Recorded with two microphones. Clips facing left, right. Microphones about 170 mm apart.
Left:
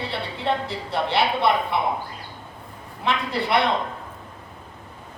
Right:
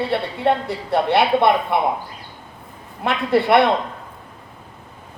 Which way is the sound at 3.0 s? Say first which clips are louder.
Right 6 dB; 55° right (ahead or behind).